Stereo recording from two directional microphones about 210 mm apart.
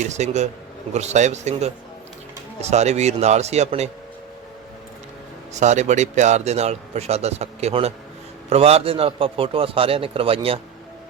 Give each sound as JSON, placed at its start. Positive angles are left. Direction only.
{"t": 0.0, "sound": "speech", "side_deg": -35}
{"t": 5.5, "sound": "a man's voice", "side_deg": -35}